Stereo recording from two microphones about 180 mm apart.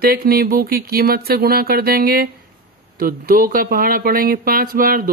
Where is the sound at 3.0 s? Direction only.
55° right (ahead or behind).